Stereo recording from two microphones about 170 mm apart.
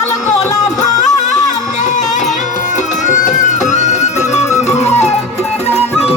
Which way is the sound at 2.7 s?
45° left (ahead or behind).